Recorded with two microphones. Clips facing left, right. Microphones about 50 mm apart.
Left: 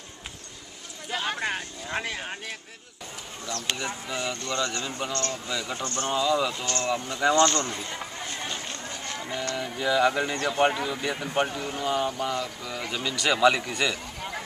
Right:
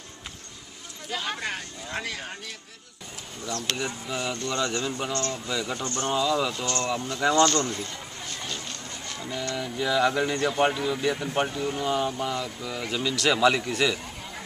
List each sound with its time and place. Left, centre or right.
1.4 s speech: left
3.6 s speech: centre
5.3 s speech: centre
8.3 s run: left
9.6 s speech: centre